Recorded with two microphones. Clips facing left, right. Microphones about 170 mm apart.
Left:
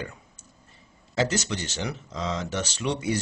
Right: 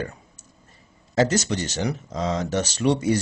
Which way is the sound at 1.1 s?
40° right (ahead or behind).